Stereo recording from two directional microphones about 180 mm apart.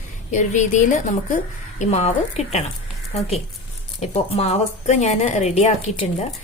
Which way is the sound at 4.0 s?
35° left (ahead or behind).